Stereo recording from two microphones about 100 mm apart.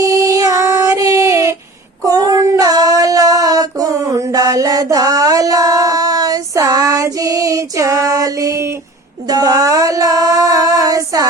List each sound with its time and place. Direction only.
0.0 s female singing: 35° right (ahead or behind)
2.0 s child singing: 40° right (ahead or behind)
9.3 s female singing: 40° right (ahead or behind)